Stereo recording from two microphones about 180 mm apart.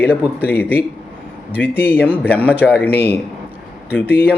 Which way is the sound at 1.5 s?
10° left (ahead or behind).